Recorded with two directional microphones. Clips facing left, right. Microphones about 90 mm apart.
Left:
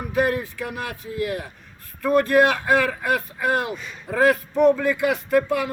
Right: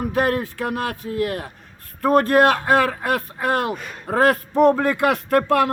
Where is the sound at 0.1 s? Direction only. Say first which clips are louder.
Left 2 dB; 50° right (ahead or behind).